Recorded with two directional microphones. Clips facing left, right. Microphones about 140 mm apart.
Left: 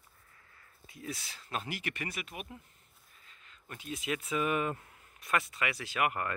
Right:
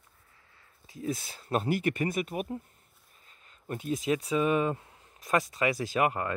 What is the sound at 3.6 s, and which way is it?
Speech, 40° right (ahead or behind).